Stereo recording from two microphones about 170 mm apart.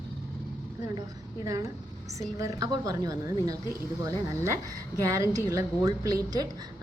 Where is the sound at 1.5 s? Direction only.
20° right (ahead or behind).